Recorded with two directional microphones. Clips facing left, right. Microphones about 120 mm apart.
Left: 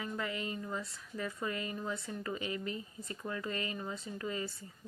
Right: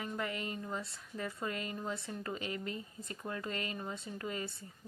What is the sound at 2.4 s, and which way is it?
Speech, 20° left (ahead or behind).